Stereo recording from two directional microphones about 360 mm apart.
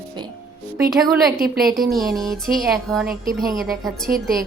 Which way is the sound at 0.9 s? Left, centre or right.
Centre.